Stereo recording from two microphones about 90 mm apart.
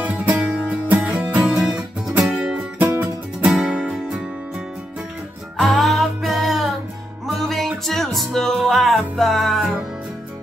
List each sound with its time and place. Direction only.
0.0 s music: 15° right (ahead or behind)
1.4 s music: 5° right (ahead or behind)
2.8 s music: 25° right (ahead or behind)
3.4 s music: centre (ahead or behind)
5.6 s music: centre (ahead or behind)